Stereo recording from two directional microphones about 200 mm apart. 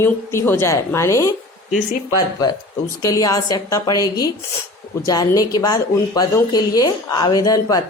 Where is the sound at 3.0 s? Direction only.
15° left (ahead or behind).